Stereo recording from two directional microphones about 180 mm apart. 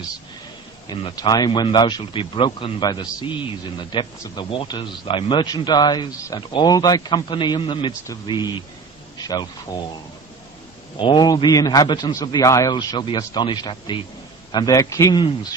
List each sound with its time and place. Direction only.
0.9 s a man's voice: 25° left (ahead or behind)
10.9 s a man's voice: 25° left (ahead or behind)